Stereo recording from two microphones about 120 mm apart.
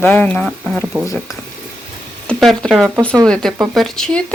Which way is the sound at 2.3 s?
5° left (ahead or behind).